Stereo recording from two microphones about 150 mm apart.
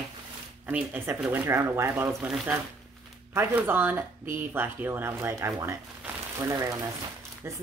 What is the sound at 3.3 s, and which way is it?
A woman's voice, 15° right (ahead or behind).